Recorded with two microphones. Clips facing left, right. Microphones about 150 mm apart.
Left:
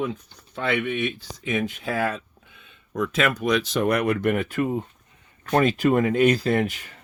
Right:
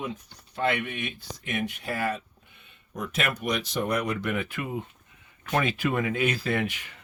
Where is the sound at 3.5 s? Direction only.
80° left.